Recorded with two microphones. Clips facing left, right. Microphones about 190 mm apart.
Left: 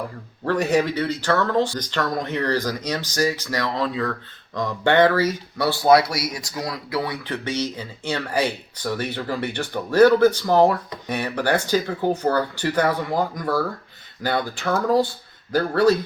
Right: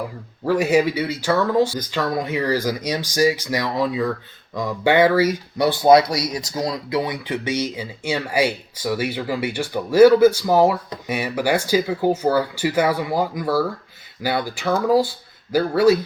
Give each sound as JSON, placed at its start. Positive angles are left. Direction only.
{"t": 0.4, "sound": "speech", "side_deg": -5}